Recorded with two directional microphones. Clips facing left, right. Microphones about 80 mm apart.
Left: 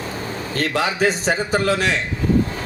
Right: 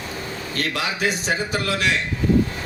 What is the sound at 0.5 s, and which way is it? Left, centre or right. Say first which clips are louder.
A man's voice: left 5 dB; left.